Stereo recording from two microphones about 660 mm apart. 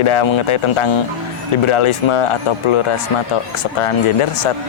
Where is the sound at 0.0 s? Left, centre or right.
Left.